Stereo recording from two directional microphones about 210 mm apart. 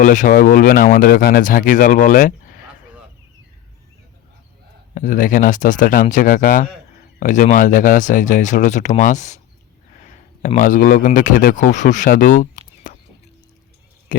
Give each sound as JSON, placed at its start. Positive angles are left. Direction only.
{"t": 0.0, "sound": "speech", "side_deg": 35}
{"t": 4.9, "sound": "speech", "side_deg": 40}
{"t": 14.1, "sound": "speech", "side_deg": 40}